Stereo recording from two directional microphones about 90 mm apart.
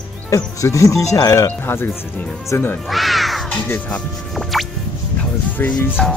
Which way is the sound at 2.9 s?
Centre (ahead or behind).